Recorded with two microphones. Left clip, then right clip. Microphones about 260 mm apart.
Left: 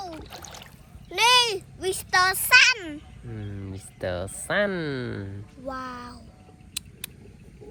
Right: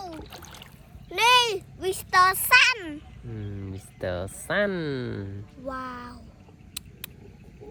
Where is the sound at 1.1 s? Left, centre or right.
Centre.